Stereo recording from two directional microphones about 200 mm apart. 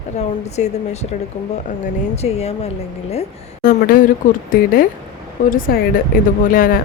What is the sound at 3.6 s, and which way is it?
Speech, 45° left (ahead or behind).